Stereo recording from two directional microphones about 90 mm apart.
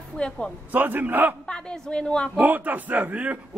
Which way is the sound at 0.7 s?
20° right (ahead or behind).